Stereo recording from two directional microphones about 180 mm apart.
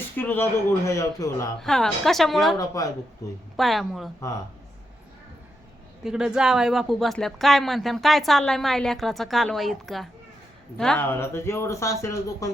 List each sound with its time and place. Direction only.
0.2 s speech: 10° left (ahead or behind)
1.5 s speech: 5° left (ahead or behind)
2.6 s speech: 20° left (ahead or behind)
3.6 s speech: centre (ahead or behind)
6.0 s speech: 5° right (ahead or behind); by 12.5 s 15° left (ahead or behind)